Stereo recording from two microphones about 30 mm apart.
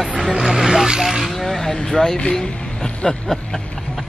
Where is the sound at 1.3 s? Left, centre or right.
Centre.